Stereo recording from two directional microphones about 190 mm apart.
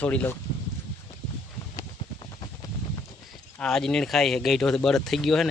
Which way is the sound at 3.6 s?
5° left (ahead or behind).